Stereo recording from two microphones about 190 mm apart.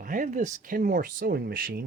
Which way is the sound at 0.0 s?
45° right (ahead or behind).